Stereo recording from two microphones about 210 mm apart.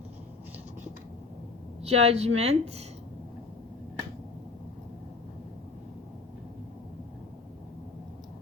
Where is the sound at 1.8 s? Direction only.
30° right (ahead or behind).